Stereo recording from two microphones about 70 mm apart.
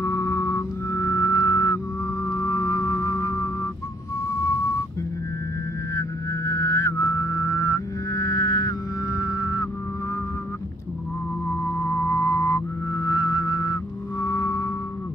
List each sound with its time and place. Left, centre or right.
0.0 s music: left
5.9 s music: left
11.4 s music: left